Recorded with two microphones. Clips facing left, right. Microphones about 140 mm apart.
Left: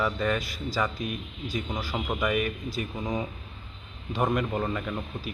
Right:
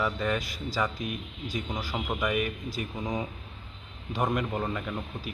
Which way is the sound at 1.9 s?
Centre (ahead or behind).